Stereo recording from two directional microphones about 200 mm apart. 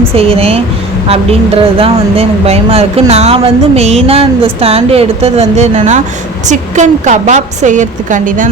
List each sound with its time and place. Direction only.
0.1 s a woman's voice: 30° right (ahead or behind)